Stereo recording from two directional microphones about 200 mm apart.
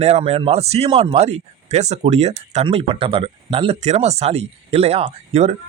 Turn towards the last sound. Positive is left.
turn(degrees=-30)  # may be behind; listen again after turning